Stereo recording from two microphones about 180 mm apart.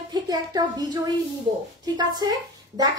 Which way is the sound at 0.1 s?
20° right (ahead or behind).